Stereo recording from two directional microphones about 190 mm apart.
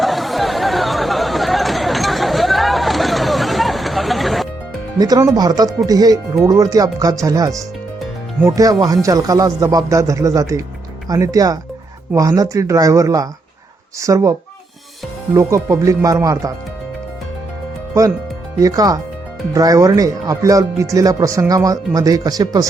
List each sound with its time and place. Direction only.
0.0 s a sound: centre (ahead or behind)
4.9 s speech: 20° right (ahead or behind)
18.6 s speech: 20° right (ahead or behind)